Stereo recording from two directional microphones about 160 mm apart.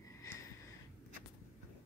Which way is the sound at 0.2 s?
20° left (ahead or behind).